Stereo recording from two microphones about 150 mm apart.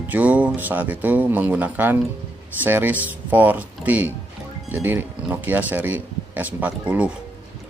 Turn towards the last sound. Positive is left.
turn(degrees=-10)  # may be behind; listen again after turning